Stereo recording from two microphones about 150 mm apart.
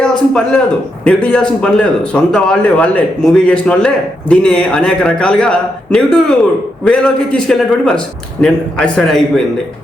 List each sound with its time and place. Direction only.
0.0 s a man's voice: 5° left (ahead or behind)